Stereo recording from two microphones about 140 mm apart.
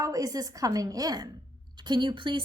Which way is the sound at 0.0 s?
25° right (ahead or behind).